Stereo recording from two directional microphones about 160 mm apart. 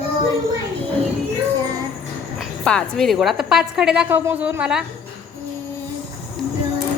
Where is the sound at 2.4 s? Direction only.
5° left (ahead or behind).